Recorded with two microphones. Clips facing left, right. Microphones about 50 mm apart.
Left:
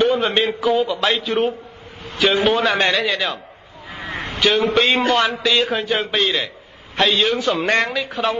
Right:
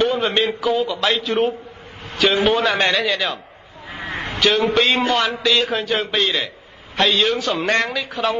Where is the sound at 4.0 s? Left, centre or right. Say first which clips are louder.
Right 1 dB; right.